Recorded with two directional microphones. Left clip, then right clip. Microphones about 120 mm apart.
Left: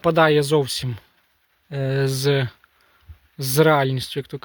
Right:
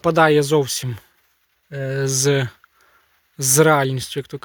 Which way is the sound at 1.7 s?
40° left (ahead or behind).